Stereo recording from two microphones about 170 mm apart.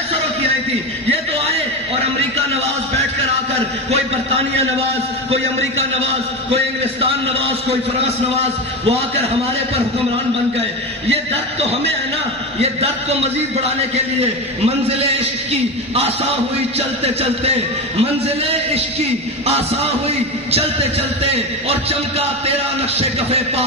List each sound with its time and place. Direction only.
2.3 s a sound: 35° right (ahead or behind)
3.5 s a man's voice: 35° right (ahead or behind)
12.5 s a man's voice: 35° right (ahead or behind)